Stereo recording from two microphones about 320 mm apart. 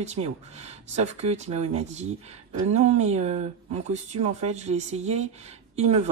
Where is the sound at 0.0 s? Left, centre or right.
Centre.